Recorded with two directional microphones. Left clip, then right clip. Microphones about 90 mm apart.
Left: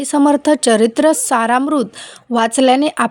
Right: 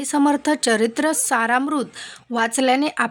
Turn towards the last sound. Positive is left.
turn(degrees=40)  # may be behind; listen again after turning